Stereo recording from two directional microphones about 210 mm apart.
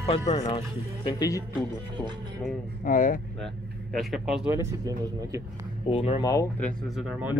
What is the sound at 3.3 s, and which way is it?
Speech, centre (ahead or behind).